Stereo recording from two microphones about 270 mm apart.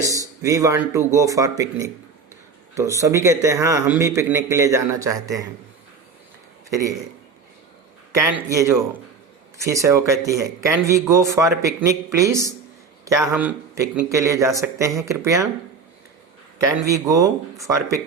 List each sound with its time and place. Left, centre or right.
0.0 s speech: centre
6.7 s a man's voice: centre
8.1 s speech: centre
16.6 s speech: centre